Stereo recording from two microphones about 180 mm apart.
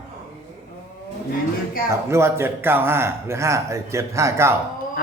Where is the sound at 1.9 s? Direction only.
15° right (ahead or behind).